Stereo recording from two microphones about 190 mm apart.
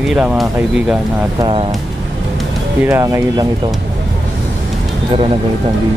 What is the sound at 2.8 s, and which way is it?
Speech, 15° right (ahead or behind).